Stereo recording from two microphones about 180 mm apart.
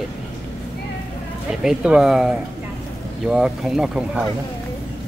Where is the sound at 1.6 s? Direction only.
5° right (ahead or behind).